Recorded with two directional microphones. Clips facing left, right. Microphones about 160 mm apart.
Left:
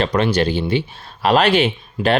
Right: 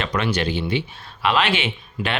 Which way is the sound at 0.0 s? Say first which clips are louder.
Left 6 dB; 35° left (ahead or behind).